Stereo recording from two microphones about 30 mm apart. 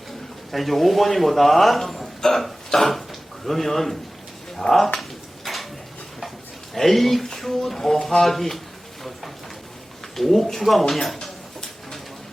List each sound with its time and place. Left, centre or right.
0.5 s speech: centre
2.2 s a sound: centre
4.6 s speech: left
6.7 s speech: centre
10.2 s speech: centre